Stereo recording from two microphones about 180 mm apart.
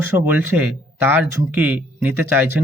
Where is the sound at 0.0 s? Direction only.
10° right (ahead or behind).